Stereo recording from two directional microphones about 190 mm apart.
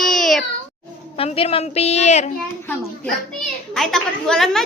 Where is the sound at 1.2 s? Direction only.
30° left (ahead or behind).